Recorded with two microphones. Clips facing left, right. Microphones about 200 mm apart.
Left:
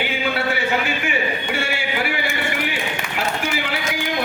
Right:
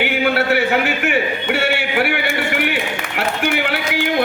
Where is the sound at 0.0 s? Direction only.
65° right (ahead or behind).